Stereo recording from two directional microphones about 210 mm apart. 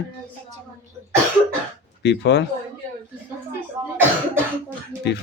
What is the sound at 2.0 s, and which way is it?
Speech, 55° left (ahead or behind).